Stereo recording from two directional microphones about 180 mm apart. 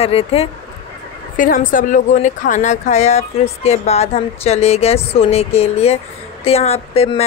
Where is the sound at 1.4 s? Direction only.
50° left (ahead or behind).